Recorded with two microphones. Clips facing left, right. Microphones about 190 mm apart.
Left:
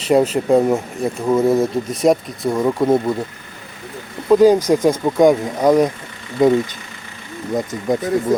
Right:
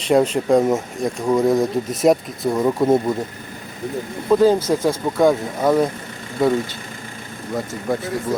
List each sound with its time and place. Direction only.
0.1 s speech: 5° left (ahead or behind)
4.3 s speech: 10° left (ahead or behind)